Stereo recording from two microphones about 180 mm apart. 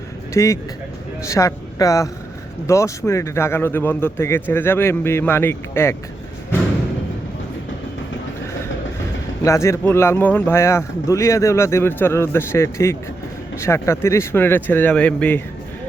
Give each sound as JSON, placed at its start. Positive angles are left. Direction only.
{"t": 0.3, "sound": "a man's voice", "side_deg": 15}
{"t": 9.4, "sound": "a man's voice", "side_deg": 15}